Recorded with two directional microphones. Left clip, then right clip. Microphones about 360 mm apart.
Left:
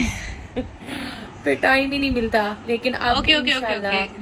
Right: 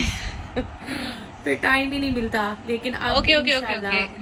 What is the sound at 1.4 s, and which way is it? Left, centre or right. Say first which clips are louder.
Speech: left 3 dB; centre.